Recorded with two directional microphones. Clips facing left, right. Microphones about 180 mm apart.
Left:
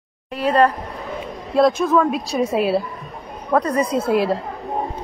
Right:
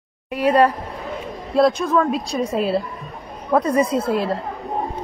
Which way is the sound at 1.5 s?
Centre (ahead or behind).